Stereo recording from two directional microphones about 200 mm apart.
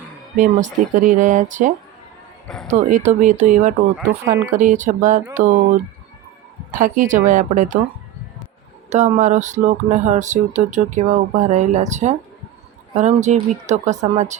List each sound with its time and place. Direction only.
0.3 s speech: 40° right (ahead or behind)
2.5 s speech: 5° left (ahead or behind)
2.9 s speech: 40° right (ahead or behind)
3.9 s speech: 5° right (ahead or behind)
4.5 s speech: 40° right (ahead or behind)
6.7 s speech: 40° right (ahead or behind)
8.9 s speech: 35° right (ahead or behind)